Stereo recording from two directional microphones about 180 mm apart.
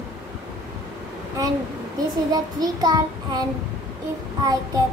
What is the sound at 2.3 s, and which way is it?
Child singing, 20° right (ahead or behind).